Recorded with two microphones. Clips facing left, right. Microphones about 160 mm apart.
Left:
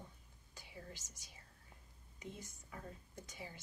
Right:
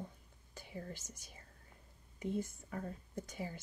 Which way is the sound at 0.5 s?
50° right (ahead or behind).